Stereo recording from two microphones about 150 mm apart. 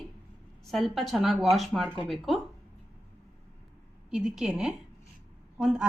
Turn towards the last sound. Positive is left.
turn(degrees=-5)  # may be behind; listen again after turning